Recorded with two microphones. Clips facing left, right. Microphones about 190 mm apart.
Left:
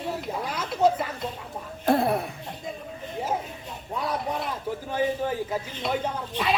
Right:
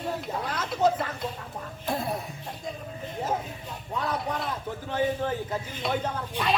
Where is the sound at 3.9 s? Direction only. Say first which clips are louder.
Left 1 dB; 10° left (ahead or behind).